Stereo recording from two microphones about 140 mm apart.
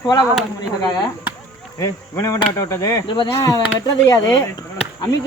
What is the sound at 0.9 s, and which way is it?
Speech, 30° left (ahead or behind).